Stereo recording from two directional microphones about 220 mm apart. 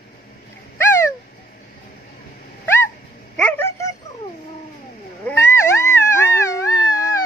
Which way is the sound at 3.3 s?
5° left (ahead or behind).